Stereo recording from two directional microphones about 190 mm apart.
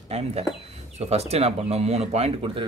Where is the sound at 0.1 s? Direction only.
35° right (ahead or behind).